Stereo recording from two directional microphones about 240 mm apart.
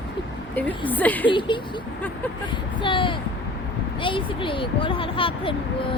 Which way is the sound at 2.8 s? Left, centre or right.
Left.